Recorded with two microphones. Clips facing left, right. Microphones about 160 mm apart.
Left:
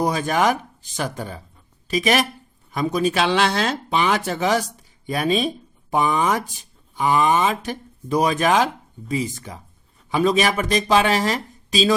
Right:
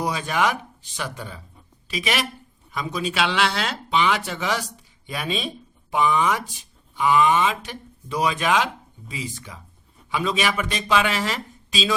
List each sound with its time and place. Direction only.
0.0 s speech: 45° left (ahead or behind)